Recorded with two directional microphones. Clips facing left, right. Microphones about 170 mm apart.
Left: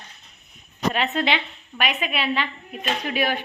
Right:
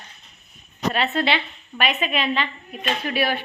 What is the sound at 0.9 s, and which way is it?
A woman's voice, 15° left (ahead or behind).